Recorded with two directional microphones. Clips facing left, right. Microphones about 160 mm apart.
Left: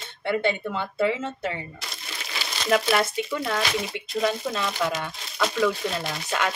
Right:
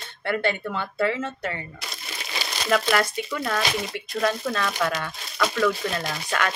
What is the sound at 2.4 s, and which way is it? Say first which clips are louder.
Crumpling: right 2 dB; 15° right (ahead or behind).